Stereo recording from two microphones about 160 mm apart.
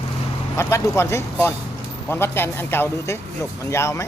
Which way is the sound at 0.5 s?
15° left (ahead or behind).